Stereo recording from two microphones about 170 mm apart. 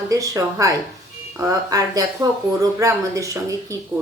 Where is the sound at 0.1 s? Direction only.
20° right (ahead or behind).